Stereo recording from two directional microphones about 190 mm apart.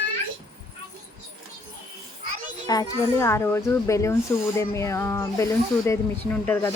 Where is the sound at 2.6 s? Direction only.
15° left (ahead or behind).